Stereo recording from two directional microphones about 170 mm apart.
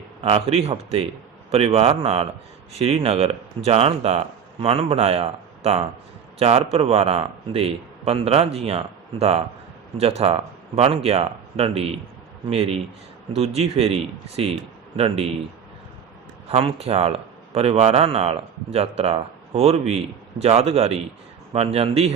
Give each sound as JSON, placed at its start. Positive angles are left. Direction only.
{"t": 0.2, "sound": "speech", "side_deg": -35}
{"t": 16.5, "sound": "speech", "side_deg": -35}